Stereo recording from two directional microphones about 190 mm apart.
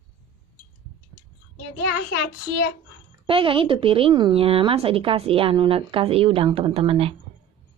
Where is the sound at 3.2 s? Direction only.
30° right (ahead or behind).